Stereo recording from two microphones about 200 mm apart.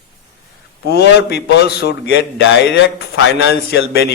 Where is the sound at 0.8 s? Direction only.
55° left (ahead or behind).